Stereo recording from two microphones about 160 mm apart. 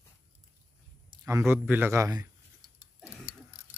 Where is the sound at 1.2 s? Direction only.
15° right (ahead or behind).